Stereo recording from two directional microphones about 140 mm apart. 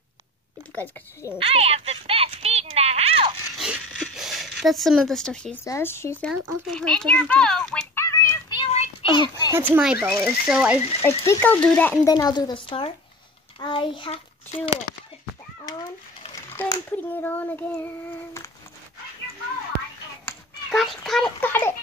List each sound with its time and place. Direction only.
1.4 s speech: 45° right (ahead or behind)
3.5 s a sound: centre (ahead or behind)
5.6 s a child's voice: 15° left (ahead or behind)
7.9 s a sound: 20° left (ahead or behind)
9.1 s a child's voice: 35° left (ahead or behind)
9.5 s speech: 10° right (ahead or behind)
11.0 s frog: 20° left (ahead or behind)
11.6 s a child's voice: 10° left (ahead or behind)
12.0 s a woman's voice: 25° left (ahead or behind)
16.5 s a child's voice: 15° left (ahead or behind)
20.7 s speech: centre (ahead or behind)
21.4 s a sound: 15° left (ahead or behind)